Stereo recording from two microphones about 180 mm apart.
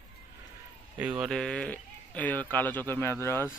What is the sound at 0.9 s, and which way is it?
Speech, 5° right (ahead or behind).